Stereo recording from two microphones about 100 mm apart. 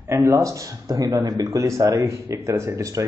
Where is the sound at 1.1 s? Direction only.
45° right (ahead or behind).